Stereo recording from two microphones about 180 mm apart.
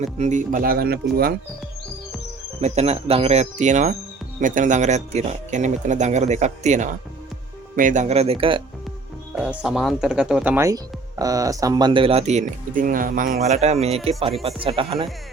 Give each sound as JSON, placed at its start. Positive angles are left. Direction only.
{"t": 0.0, "sound": "speech", "side_deg": -40}
{"t": 2.6, "sound": "speech", "side_deg": -35}
{"t": 9.4, "sound": "speech", "side_deg": -5}
{"t": 13.5, "sound": "speech", "side_deg": -35}